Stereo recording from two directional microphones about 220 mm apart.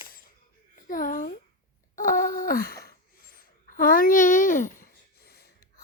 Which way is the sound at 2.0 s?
40° left (ahead or behind).